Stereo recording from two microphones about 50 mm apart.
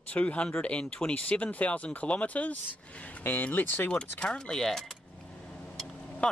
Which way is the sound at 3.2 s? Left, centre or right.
Left.